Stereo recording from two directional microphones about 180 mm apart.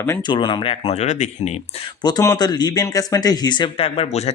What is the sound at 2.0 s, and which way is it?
Speech, 20° left (ahead or behind).